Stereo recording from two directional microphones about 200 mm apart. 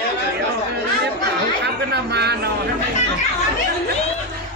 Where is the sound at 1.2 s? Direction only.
55° right (ahead or behind).